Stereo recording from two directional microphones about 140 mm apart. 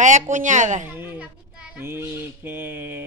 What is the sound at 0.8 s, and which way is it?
Speech, 15° right (ahead or behind).